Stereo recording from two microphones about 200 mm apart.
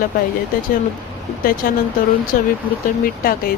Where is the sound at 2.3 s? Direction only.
45° left (ahead or behind).